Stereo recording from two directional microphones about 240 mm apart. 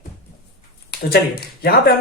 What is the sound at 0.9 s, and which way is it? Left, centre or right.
Speech, left.